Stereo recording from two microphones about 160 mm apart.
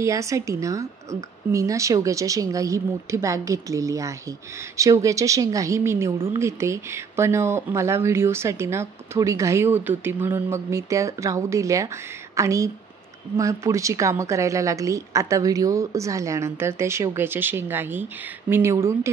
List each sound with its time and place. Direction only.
0.0 s a woman's voice: 20° right (ahead or behind)